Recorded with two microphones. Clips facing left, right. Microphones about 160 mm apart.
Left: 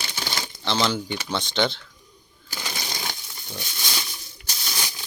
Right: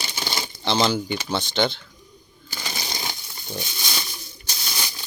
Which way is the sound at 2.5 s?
5° right (ahead or behind).